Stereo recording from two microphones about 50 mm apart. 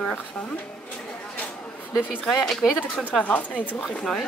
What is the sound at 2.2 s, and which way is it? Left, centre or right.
Speech, centre.